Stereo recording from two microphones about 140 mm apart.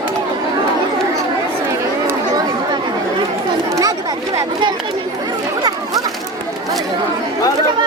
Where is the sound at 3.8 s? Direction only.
25° right (ahead or behind).